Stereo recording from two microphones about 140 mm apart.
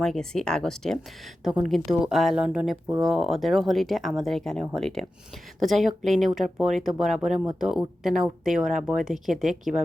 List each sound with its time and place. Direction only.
0.0 s speech: 5° left (ahead or behind)